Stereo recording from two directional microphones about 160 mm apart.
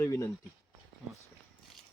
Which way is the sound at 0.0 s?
15° left (ahead or behind).